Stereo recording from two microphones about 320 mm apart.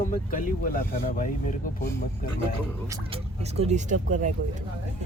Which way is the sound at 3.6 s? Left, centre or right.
Right.